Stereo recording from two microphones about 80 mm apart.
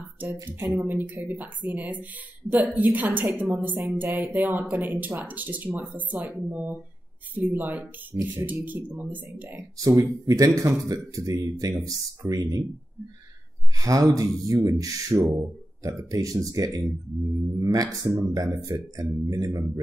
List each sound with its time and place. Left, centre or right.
0.5 s speech: right
9.8 s speech: right
13.7 s speech: right